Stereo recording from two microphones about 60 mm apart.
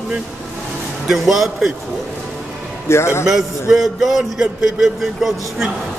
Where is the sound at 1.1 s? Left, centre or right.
Centre.